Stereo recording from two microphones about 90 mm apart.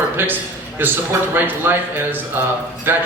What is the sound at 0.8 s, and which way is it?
Speech, 20° right (ahead or behind).